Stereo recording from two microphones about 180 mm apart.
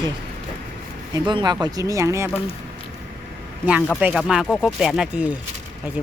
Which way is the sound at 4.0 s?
5° right (ahead or behind).